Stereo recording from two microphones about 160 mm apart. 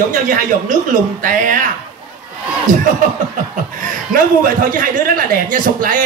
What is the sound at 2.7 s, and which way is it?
Speech, 50° right (ahead or behind).